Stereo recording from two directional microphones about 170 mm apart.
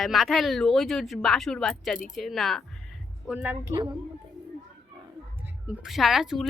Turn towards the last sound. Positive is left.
turn(degrees=0)  # may be behind; listen again after turning